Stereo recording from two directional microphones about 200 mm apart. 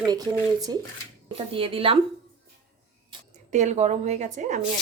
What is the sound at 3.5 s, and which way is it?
A woman's voice, 35° right (ahead or behind).